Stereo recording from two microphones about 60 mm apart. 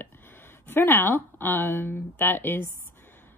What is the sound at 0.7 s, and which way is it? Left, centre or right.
A woman's voice, left.